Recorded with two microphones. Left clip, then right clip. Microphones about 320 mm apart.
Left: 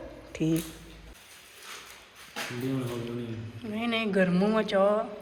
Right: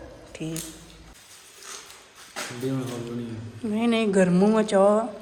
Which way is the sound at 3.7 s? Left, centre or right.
Centre.